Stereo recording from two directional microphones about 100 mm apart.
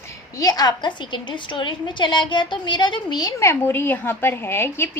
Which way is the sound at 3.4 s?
25° left (ahead or behind).